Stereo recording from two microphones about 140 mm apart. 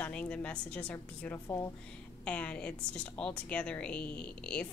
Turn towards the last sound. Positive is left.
turn(degrees=10)  # may be behind; listen again after turning